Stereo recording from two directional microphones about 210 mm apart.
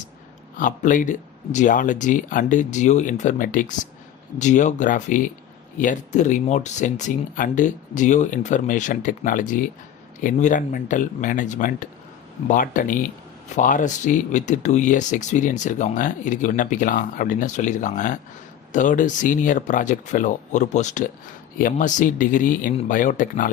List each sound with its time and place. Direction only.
0.5 s speech: 40° left (ahead or behind)